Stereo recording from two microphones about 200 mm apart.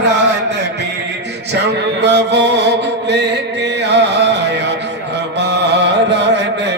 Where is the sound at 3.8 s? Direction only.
60° right (ahead or behind).